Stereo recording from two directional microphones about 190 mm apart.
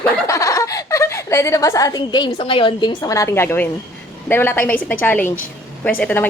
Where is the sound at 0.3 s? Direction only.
15° left (ahead or behind).